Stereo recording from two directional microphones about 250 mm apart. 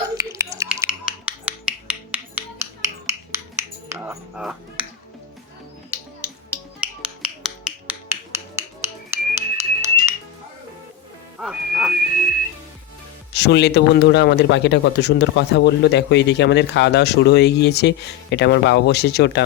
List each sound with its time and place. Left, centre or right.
0.2 s finger snapping: centre
6.7 s music: centre
11.3 s music: centre
13.3 s a man's voice: left